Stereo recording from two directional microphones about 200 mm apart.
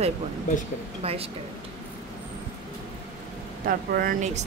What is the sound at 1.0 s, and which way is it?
Speech, 30° right (ahead or behind).